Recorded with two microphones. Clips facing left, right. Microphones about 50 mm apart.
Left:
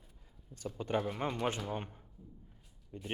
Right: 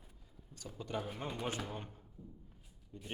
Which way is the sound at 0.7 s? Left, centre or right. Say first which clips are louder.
Left 8 dB; centre.